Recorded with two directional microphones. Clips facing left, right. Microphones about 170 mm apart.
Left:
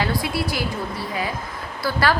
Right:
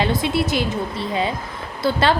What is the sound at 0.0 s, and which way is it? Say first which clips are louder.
A woman's voice: right 4 dB; 20° right (ahead or behind).